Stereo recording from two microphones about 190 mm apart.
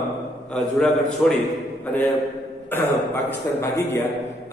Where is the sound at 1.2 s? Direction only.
5° left (ahead or behind).